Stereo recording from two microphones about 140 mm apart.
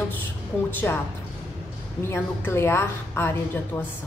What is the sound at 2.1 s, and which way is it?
A woman's voice, 15° left (ahead or behind).